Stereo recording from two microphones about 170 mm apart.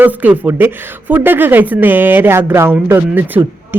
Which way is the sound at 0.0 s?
10° right (ahead or behind).